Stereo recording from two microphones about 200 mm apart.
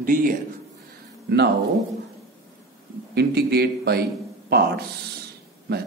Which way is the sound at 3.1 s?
55° right (ahead or behind).